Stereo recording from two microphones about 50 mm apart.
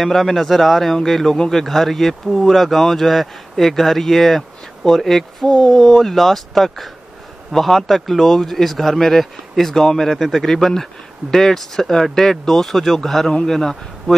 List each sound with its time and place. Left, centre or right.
0.0 s speech: centre
5.5 s speech: centre
5.8 s speech: centre
10.1 s speech: centre
10.4 s speech: centre